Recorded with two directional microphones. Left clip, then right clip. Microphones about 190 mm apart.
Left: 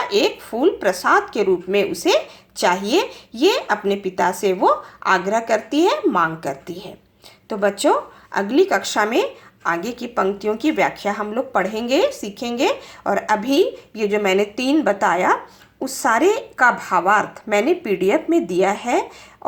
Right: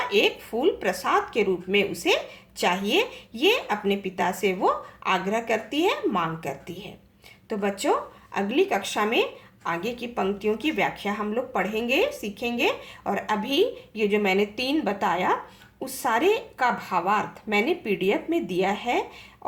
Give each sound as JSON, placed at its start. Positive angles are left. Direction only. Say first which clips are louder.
{"t": 0.1, "sound": "speech", "louder": "left 4 dB", "side_deg": 30}